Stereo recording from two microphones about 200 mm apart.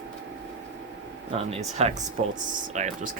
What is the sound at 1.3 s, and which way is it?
Speech, 30° right (ahead or behind).